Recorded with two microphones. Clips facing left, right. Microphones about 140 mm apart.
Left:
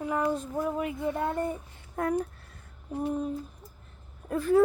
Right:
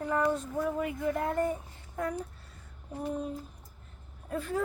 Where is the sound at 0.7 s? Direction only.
25° left (ahead or behind).